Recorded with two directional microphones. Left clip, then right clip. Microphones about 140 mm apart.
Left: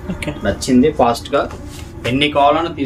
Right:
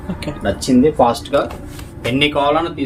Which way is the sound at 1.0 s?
20° left (ahead or behind).